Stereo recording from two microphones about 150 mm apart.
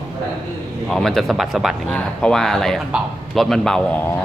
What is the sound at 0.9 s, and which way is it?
Speech, 5° left (ahead or behind).